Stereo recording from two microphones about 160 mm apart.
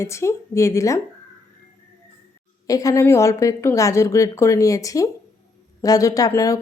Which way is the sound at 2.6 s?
20° left (ahead or behind).